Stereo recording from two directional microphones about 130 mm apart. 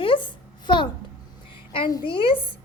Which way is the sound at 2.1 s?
40° left (ahead or behind).